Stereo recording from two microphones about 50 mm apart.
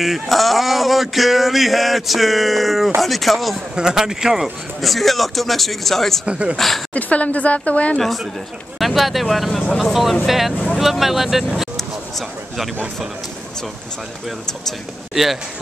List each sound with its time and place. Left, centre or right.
0.0 s male singing: centre
3.7 s male singing: centre
6.2 s speech: right
6.5 s male singing: centre
6.9 s speech: left
8.7 s male singing: centre
10.8 s speech: centre